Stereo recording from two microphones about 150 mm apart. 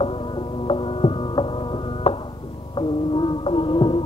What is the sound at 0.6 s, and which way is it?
Music, 35° left (ahead or behind).